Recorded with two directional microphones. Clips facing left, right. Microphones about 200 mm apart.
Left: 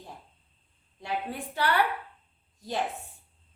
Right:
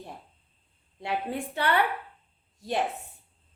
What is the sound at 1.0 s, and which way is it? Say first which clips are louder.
Speech: right 3 dB; 25° right (ahead or behind).